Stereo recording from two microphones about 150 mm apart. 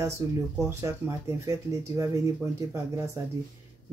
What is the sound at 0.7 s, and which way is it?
Speech, 20° right (ahead or behind).